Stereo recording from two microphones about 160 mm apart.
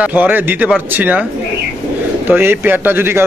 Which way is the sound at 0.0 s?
10° right (ahead or behind).